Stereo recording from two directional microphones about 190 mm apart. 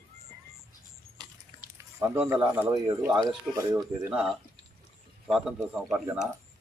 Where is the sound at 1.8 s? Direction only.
15° right (ahead or behind).